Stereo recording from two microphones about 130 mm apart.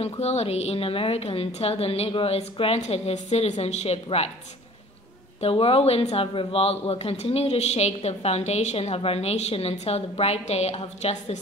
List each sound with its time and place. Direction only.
0.0 s speech: 55° left (ahead or behind)
5.4 s speech: 45° left (ahead or behind)